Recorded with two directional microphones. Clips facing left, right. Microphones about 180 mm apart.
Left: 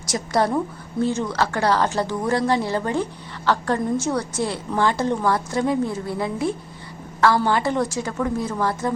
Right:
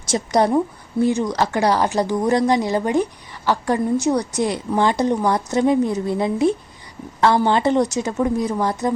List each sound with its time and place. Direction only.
0.0 s a woman's voice: 20° right (ahead or behind)